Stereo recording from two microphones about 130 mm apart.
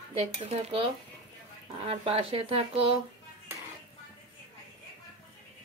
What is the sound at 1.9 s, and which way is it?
Speech, 45° right (ahead or behind).